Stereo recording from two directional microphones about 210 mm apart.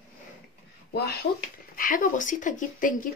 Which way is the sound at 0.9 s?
50° left (ahead or behind).